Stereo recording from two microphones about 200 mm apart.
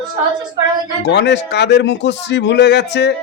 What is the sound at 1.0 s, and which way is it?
Speech, 60° left (ahead or behind).